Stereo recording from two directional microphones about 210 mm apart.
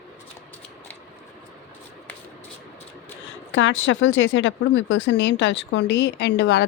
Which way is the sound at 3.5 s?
65° left (ahead or behind).